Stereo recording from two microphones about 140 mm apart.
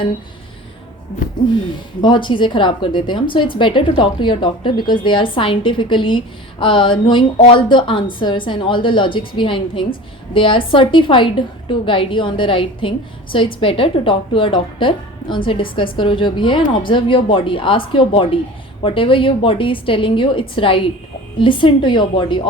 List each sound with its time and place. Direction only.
2.0 s a woman's voice: 35° left (ahead or behind)